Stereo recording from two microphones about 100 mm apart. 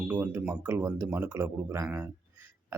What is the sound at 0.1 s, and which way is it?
A man's voice, 20° right (ahead or behind).